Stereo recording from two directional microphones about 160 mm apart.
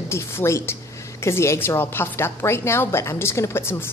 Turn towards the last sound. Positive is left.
turn(degrees=15)  # may be behind; listen again after turning